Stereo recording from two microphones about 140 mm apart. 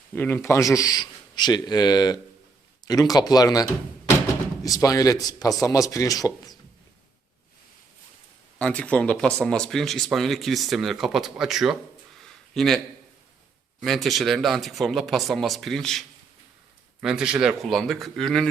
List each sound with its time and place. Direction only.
0.1 s speech: 15° left (ahead or behind)
8.5 s speech: 10° left (ahead or behind)
13.8 s speech: centre (ahead or behind)